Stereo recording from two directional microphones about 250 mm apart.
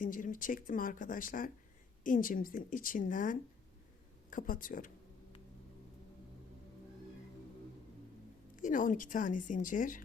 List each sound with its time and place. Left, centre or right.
0.0 s speech: left
8.5 s speech: left